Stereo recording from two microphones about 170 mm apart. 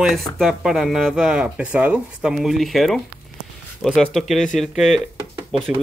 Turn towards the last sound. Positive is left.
turn(degrees=0)  # may be behind; listen again after turning